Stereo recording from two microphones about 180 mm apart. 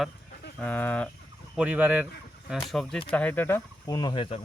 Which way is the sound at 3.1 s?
10° left (ahead or behind).